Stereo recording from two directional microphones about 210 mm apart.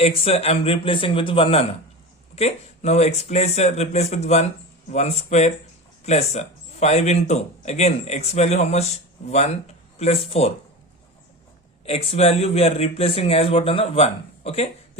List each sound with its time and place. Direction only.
0.0 s a man's voice: 30° left (ahead or behind)
11.9 s a man's voice: 30° left (ahead or behind)